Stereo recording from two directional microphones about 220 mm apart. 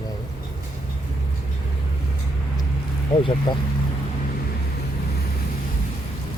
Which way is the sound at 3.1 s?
25° left (ahead or behind).